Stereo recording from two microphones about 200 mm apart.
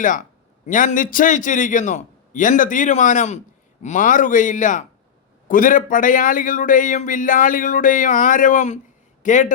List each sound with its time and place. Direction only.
0.0 s a man's voice: 40° left (ahead or behind)